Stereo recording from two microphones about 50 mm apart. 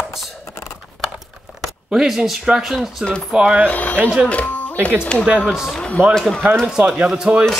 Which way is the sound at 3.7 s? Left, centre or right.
Left.